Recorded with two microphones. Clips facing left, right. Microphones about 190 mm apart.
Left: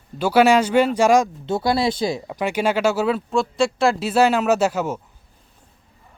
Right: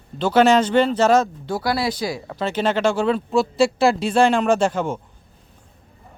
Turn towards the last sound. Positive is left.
turn(degrees=5)  # may be behind; listen again after turning